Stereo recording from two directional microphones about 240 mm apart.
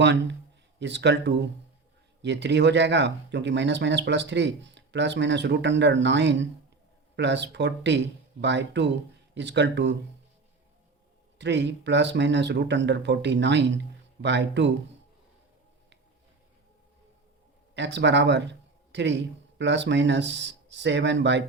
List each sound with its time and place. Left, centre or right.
0.0 s speech: right
11.3 s speech: right
17.7 s speech: right